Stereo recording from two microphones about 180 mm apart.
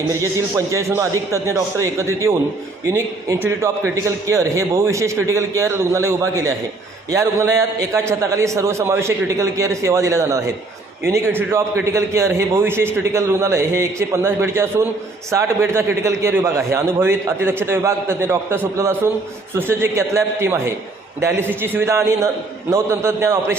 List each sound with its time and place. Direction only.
0.1 s a man's voice: 15° right (ahead or behind)